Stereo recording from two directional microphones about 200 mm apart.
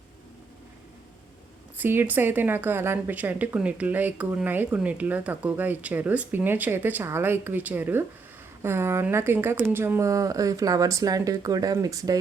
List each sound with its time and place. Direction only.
1.8 s a woman's voice: 10° right (ahead or behind)